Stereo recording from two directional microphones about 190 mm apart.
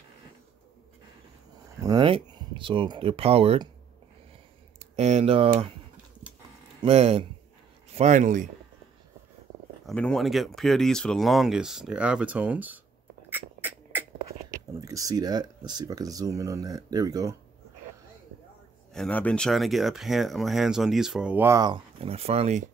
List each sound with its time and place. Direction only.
1.8 s speech: 20° right (ahead or behind)
4.7 s speech: 35° right (ahead or behind)
6.8 s speech: 35° right (ahead or behind)
9.8 s speech: 5° left (ahead or behind)
13.3 s a sound: 10° right (ahead or behind)
14.8 s speech: 15° right (ahead or behind)
18.9 s speech: 5° left (ahead or behind); by 21.7 s 15° right (ahead or behind)
22.0 s speech: 30° right (ahead or behind)